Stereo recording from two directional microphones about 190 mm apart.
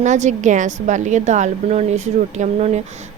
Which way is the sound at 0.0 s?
40° right (ahead or behind).